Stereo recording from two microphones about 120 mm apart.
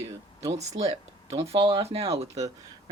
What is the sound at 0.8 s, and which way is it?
Speech, 60° right (ahead or behind).